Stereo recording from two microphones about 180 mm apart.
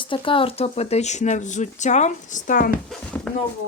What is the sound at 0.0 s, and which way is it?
Speech, 30° left (ahead or behind).